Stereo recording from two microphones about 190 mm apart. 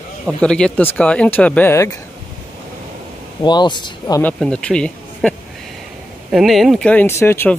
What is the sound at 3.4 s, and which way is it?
Speech, 25° left (ahead or behind).